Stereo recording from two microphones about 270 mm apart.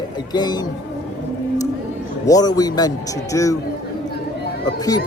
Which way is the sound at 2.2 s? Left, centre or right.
Centre.